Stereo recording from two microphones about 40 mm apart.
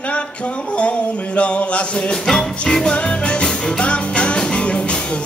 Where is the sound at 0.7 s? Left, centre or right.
Left.